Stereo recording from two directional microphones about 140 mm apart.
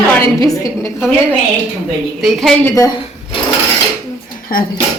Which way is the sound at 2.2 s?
Centre (ahead or behind).